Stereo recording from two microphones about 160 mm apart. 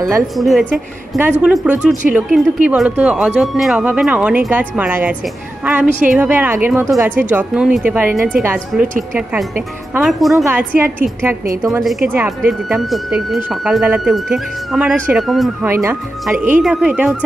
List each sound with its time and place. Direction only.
0.4 s speech: centre (ahead or behind)
9.9 s speech: centre (ahead or behind)
10.3 s speech: 15° right (ahead or behind)
12.1 s speech: 5° right (ahead or behind)
15.6 s speech: 15° right (ahead or behind)